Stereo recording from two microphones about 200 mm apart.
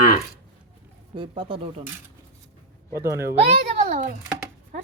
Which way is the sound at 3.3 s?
30° right (ahead or behind).